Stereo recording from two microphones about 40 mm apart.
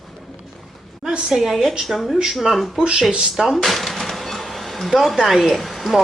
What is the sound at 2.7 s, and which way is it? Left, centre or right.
Speech, centre.